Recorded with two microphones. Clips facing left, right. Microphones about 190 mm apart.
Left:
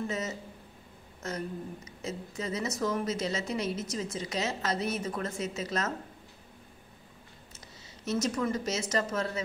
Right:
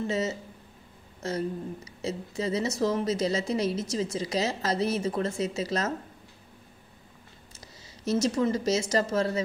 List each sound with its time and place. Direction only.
0.0 s a woman's voice: 30° right (ahead or behind)
8.0 s a woman's voice: 30° right (ahead or behind)